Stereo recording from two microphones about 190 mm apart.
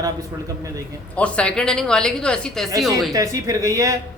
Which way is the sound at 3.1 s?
15° right (ahead or behind).